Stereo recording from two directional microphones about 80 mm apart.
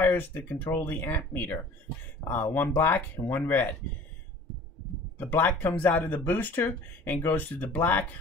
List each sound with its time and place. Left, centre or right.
0.0 s speech: left
5.1 s speech: left